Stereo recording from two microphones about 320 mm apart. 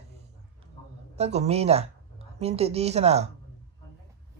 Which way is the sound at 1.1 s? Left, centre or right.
Centre.